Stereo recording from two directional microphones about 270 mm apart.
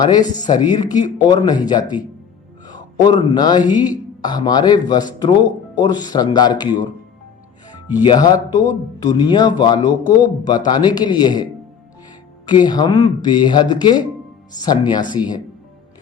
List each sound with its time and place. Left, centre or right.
0.0 s a man's voice: centre
8.0 s speech: centre
12.5 s speech: centre